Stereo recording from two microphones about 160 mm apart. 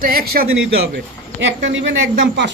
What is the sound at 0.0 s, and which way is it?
Speech, 65° right (ahead or behind).